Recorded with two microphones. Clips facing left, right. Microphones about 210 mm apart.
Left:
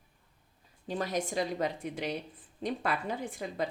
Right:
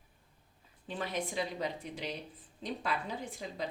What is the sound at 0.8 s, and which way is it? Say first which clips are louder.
A woman's voice: left 4 dB; 40° left (ahead or behind).